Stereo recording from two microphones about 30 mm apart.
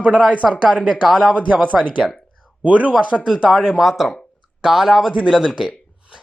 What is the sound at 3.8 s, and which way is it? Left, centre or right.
Speech, centre.